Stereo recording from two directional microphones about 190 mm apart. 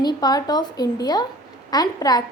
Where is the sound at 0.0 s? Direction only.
20° left (ahead or behind).